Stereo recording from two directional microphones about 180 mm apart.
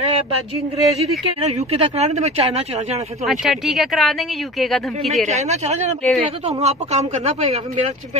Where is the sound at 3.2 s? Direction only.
Centre (ahead or behind).